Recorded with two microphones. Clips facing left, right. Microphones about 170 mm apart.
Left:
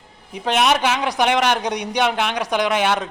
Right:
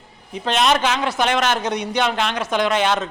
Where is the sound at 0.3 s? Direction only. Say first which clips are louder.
Even; 10° left (ahead or behind).